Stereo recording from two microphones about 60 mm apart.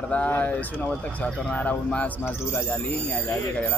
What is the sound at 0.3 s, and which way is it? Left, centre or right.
Speech, left.